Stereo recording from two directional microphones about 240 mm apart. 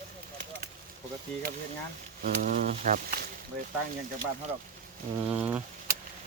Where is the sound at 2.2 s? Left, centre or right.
Right.